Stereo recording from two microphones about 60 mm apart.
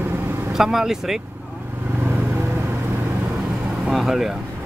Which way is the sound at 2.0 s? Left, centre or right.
Right.